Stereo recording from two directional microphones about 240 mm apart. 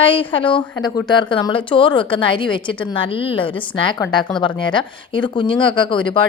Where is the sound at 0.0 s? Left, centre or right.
Left.